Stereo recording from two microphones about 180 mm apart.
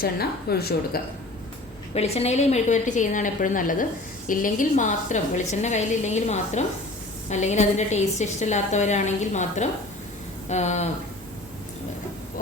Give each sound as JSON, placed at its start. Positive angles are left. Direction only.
{"t": 0.0, "sound": "speech", "side_deg": 60}
{"t": 1.9, "sound": "a woman's voice", "side_deg": 35}